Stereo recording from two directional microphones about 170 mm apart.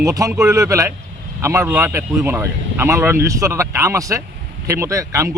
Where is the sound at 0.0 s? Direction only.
20° right (ahead or behind).